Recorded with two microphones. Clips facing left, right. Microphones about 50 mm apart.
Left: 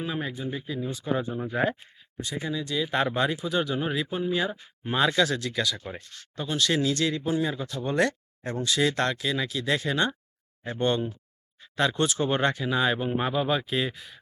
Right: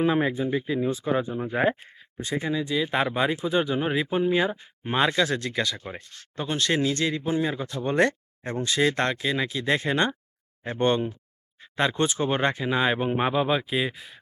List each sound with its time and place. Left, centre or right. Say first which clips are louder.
0.0 s speech: right 8 dB; right
0.9 s speech: right 3 dB; right
1.7 s speech: right 4 dB; right
2.4 s speech: right 3 dB; right
2.8 s speech: left 1 dB; centre; by 5.8 s right
5.8 s speech: right 1 dB; centre
6.3 s speech: right 1 dB; right; by 14.2 s centre